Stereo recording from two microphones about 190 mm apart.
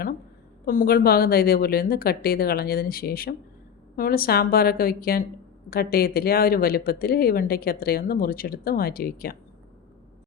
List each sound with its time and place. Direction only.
0.6 s speech: 50° left (ahead or behind)